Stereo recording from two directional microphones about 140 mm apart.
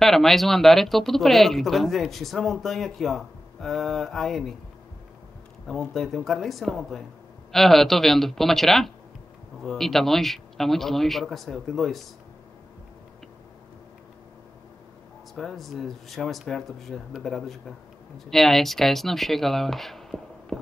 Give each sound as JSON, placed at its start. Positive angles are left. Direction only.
{"t": 0.0, "sound": "speech", "side_deg": 0}
{"t": 5.7, "sound": "speech", "side_deg": 0}
{"t": 15.3, "sound": "speech", "side_deg": 0}